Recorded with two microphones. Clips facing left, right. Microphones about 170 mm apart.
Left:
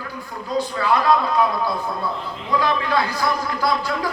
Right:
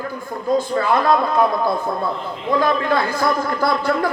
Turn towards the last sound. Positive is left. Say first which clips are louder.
# right 4 dB
turn(degrees=-55)  # may be behind; listen again after turning